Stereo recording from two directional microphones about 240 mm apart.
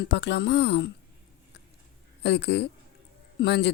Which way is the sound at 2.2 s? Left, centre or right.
Left.